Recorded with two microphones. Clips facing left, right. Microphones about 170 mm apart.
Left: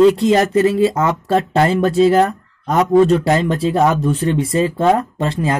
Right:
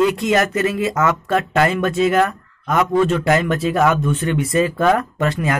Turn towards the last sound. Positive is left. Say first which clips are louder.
# left 1 dB
turn(degrees=30)  # may be behind; listen again after turning